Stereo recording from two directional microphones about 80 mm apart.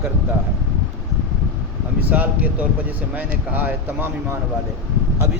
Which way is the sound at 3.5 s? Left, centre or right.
Right.